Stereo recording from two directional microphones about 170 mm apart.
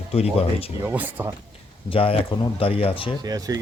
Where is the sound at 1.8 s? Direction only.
35° left (ahead or behind).